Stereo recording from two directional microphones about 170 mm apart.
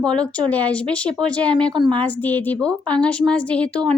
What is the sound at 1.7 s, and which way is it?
Speech, 25° right (ahead or behind).